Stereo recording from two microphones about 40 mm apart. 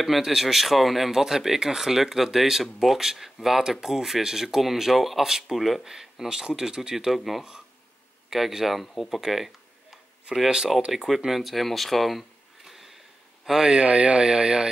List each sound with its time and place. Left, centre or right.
0.0 s speech: centre
7.1 s speech: centre
13.7 s speech: right
14.2 s speech: centre